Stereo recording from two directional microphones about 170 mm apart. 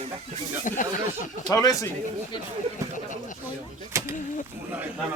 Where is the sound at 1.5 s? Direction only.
20° left (ahead or behind).